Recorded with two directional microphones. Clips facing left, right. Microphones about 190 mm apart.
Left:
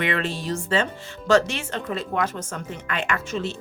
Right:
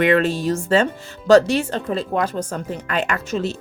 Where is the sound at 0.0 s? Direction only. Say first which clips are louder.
Right 9 dB; 45° right (ahead or behind).